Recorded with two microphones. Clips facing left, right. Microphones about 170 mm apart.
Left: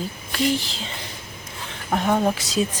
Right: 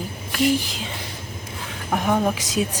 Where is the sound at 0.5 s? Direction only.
10° right (ahead or behind).